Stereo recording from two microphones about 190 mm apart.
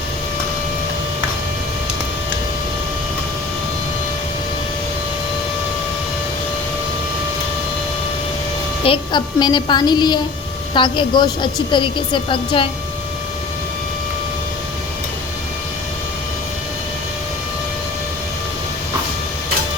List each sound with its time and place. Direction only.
8.8 s a woman's voice: 25° left (ahead or behind)